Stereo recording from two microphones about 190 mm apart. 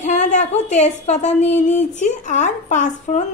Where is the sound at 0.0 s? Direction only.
40° left (ahead or behind).